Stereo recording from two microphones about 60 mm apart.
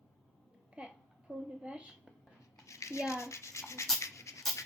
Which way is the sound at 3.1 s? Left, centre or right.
Left.